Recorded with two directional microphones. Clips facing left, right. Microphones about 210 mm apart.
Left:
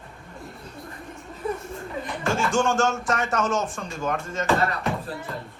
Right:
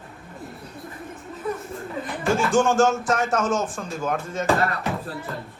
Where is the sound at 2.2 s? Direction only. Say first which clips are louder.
Right 3 dB; centre (ahead or behind).